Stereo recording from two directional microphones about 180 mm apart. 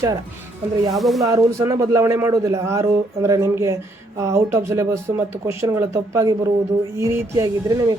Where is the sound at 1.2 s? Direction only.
15° right (ahead or behind).